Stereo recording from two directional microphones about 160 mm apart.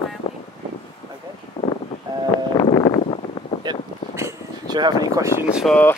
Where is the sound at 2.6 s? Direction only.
35° left (ahead or behind).